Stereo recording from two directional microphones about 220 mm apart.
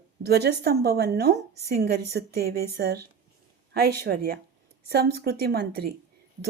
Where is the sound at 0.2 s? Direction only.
45° right (ahead or behind).